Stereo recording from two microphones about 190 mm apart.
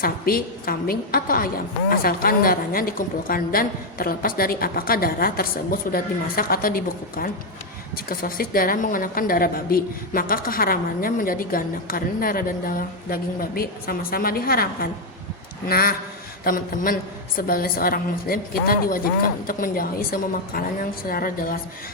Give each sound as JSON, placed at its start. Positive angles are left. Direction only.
{"t": 0.0, "sound": "a woman's voice", "side_deg": 50}